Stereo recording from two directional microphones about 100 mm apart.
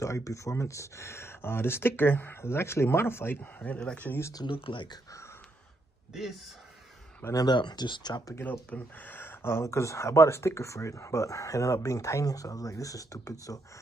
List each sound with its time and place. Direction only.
0.0 s speech: 30° left (ahead or behind)
4.5 s speech: 55° left (ahead or behind)
7.3 s speech: 45° left (ahead or behind)
8.4 s speech: 15° left (ahead or behind); by 13.6 s 35° left (ahead or behind)